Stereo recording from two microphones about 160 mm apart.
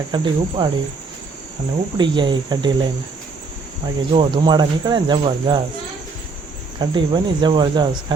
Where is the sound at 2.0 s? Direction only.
30° right (ahead or behind).